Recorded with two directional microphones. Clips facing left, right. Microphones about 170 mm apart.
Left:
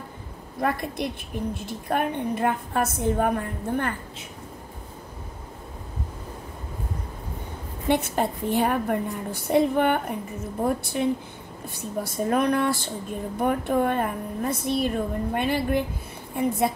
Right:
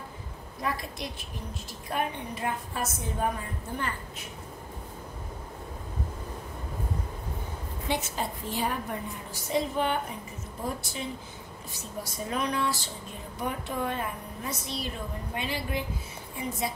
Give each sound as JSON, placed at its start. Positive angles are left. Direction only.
{"t": 0.6, "sound": "a woman's voice", "side_deg": 55}
{"t": 7.9, "sound": "a woman's voice", "side_deg": 60}